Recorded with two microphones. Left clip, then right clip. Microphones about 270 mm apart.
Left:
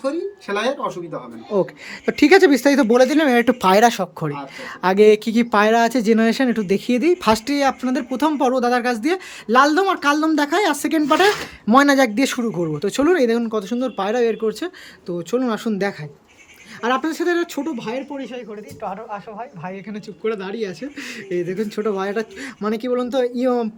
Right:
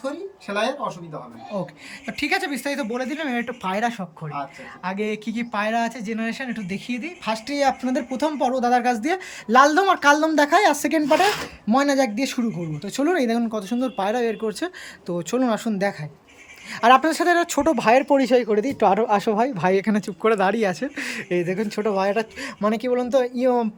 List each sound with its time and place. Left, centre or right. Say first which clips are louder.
0.0 s speech: left 6 dB; centre
2.0 s speech: left 11 dB; centre
19.8 s speech: right 4 dB; centre